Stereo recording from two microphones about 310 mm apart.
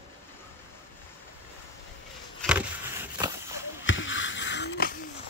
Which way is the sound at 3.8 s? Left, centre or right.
Left.